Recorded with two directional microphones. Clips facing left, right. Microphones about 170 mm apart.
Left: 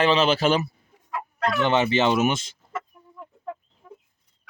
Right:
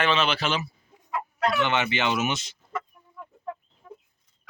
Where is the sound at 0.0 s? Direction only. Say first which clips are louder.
Left 5 dB; 35° left (ahead or behind).